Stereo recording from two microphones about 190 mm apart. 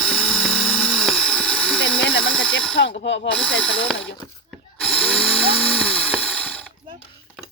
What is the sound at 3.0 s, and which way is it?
Speech, 70° left (ahead or behind).